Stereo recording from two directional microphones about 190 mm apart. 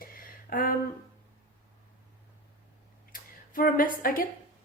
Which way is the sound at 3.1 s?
50° left (ahead or behind).